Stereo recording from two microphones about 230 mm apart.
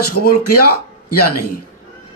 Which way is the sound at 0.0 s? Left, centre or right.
Left.